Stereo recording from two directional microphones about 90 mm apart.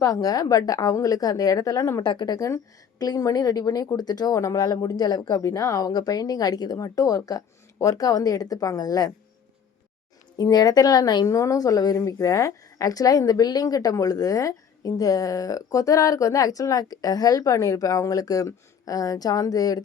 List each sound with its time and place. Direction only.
0.0 s a woman's voice: 45° left (ahead or behind)
2.0 s speech: 50° left (ahead or behind)
4.4 s speech: 35° left (ahead or behind)
5.4 s speech: 35° left (ahead or behind)
10.3 s a woman's voice: 45° left (ahead or behind)